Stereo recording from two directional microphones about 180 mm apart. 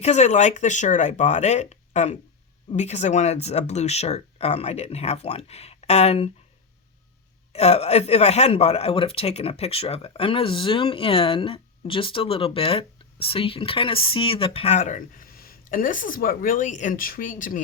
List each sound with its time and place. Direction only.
0.0 s speech: 40° left (ahead or behind)
7.5 s speech: 35° left (ahead or behind)